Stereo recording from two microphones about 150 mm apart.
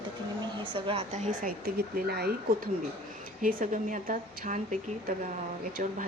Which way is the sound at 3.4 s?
65° right (ahead or behind).